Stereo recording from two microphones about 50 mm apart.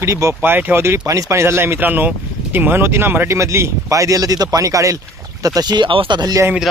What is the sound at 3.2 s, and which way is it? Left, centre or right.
Speech, right.